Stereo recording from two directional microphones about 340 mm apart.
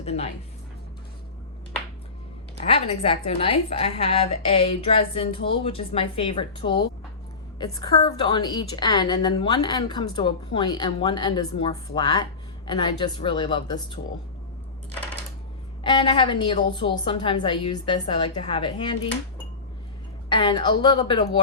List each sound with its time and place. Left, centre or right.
0.0 s speech: centre
2.6 s a woman's voice: centre
15.8 s a woman's voice: centre
20.3 s a woman's voice: centre